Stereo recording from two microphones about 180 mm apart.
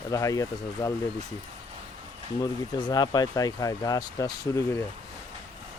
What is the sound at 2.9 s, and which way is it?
Speech, 25° left (ahead or behind).